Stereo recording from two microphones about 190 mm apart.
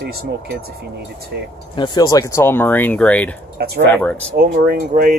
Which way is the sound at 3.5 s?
55° right (ahead or behind).